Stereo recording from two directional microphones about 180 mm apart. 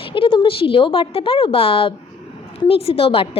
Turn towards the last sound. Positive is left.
turn(degrees=30)  # may be behind; listen again after turning